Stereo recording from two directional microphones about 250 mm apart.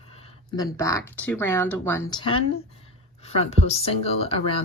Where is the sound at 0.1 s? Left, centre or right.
Centre.